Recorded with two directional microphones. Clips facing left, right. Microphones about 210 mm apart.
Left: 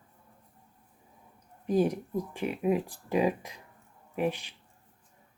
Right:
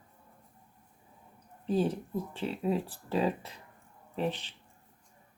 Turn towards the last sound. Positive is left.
turn(degrees=10)  # may be behind; listen again after turning